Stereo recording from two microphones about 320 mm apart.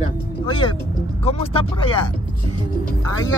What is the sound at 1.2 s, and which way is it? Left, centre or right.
Speech, centre.